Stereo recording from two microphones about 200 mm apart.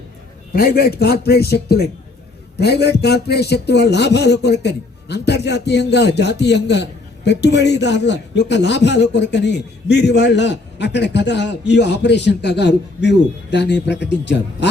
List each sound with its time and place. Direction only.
0.5 s a man's voice: 50° left (ahead or behind)